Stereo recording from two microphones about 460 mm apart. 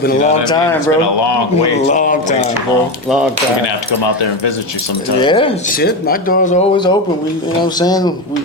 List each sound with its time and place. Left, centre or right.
0.0 s speech: centre
0.9 s speech: left
1.9 s speech: centre
4.0 s speech: left
5.2 s speech: centre